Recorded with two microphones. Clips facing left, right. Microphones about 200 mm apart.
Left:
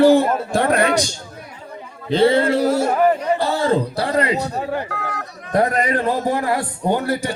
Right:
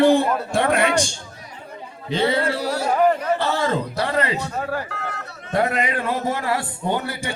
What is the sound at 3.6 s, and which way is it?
Speech, 35° left (ahead or behind).